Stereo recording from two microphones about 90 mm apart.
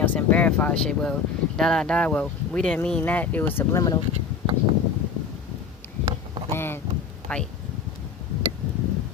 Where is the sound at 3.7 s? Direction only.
45° left (ahead or behind).